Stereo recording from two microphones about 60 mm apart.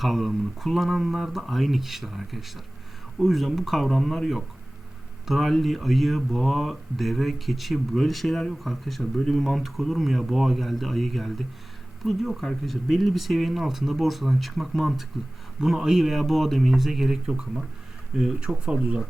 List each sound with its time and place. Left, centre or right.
0.0 s speech: centre